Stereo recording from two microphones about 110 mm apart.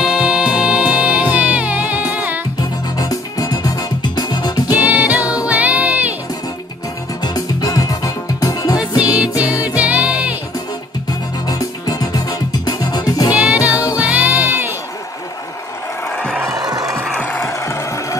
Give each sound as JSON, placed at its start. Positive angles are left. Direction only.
{"t": 0.0, "sound": "music", "side_deg": -10}
{"t": 3.0, "sound": "music", "side_deg": 35}
{"t": 4.8, "sound": "music", "side_deg": -15}
{"t": 7.2, "sound": "music", "side_deg": 35}
{"t": 9.0, "sound": "music", "side_deg": -10}
{"t": 11.1, "sound": "music", "side_deg": 35}
{"t": 13.3, "sound": "music", "side_deg": -10}
{"t": 16.4, "sound": "music", "side_deg": -35}
{"t": 17.2, "sound": "music", "side_deg": 20}